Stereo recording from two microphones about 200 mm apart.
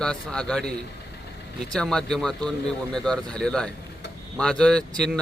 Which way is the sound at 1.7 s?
5° left (ahead or behind).